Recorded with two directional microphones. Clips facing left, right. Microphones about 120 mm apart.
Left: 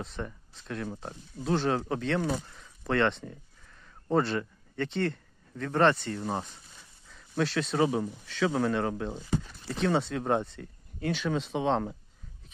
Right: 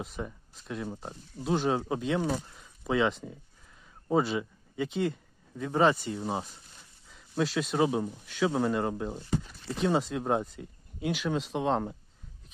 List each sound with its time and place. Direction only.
0.0 s speech: 10° right (ahead or behind)